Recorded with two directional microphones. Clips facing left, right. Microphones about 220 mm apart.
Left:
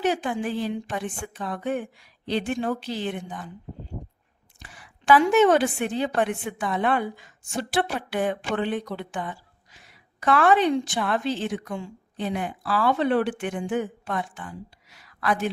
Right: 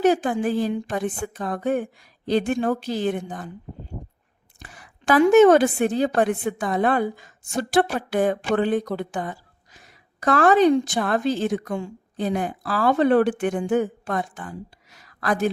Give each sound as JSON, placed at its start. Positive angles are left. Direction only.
{"t": 0.0, "sound": "a woman's voice", "side_deg": -45}
{"t": 4.6, "sound": "a woman's voice", "side_deg": -50}